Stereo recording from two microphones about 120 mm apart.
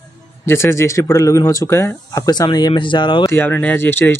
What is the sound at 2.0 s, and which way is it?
Speech, 30° left (ahead or behind).